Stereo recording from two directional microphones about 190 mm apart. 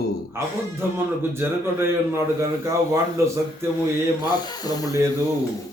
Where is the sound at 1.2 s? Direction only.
10° right (ahead or behind).